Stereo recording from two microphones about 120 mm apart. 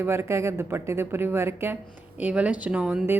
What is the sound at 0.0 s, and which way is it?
A woman's voice, 20° right (ahead or behind).